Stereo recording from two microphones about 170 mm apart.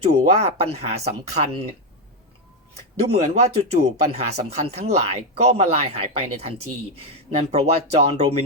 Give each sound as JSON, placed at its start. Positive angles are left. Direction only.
{"t": 0.0, "sound": "speech", "side_deg": -40}
{"t": 3.1, "sound": "speech", "side_deg": -40}